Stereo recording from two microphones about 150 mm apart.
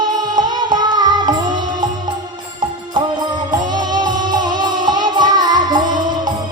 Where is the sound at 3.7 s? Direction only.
30° right (ahead or behind).